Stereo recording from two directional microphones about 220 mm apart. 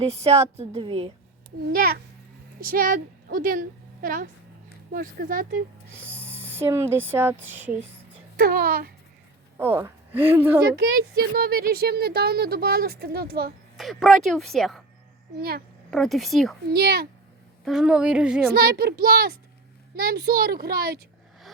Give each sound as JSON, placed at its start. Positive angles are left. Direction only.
{"t": 0.0, "sound": "a woman's voice", "side_deg": -30}
{"t": 1.7, "sound": "a woman's voice", "side_deg": -45}
{"t": 6.2, "sound": "speech", "side_deg": -10}
{"t": 8.4, "sound": "speech", "side_deg": -40}
{"t": 9.6, "sound": "a woman's voice", "side_deg": -10}
{"t": 10.9, "sound": "speech", "side_deg": -45}
{"t": 13.7, "sound": "speech", "side_deg": 0}
{"t": 15.4, "sound": "speech", "side_deg": -45}
{"t": 15.9, "sound": "speech", "side_deg": 0}
{"t": 16.7, "sound": "speech", "side_deg": -45}
{"t": 17.7, "sound": "speech", "side_deg": -5}
{"t": 18.5, "sound": "speech", "side_deg": -45}